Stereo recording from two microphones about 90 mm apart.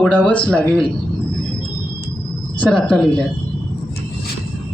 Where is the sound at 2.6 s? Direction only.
10° left (ahead or behind).